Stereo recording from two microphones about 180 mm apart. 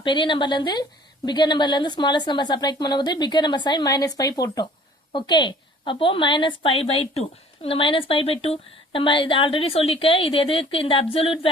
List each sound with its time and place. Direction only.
0.0 s a woman's voice: 25° left (ahead or behind)